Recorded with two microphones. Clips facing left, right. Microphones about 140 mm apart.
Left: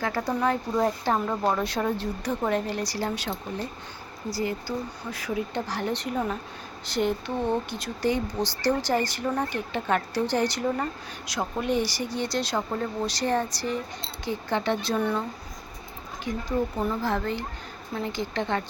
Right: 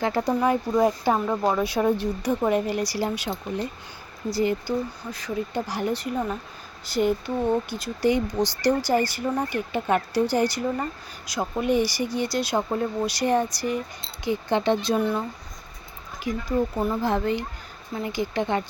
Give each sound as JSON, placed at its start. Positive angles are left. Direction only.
{"t": 0.0, "sound": "speech", "side_deg": -25}
{"t": 0.3, "sound": "speech", "side_deg": -10}
{"t": 5.1, "sound": "speech", "side_deg": 5}
{"t": 5.5, "sound": "a woman's voice", "side_deg": -10}
{"t": 17.0, "sound": "speech", "side_deg": -20}